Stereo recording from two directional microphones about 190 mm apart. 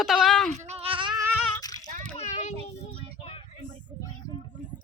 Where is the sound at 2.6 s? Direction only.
30° right (ahead or behind).